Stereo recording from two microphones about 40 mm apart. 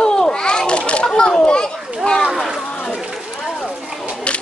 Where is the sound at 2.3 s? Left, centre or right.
Centre.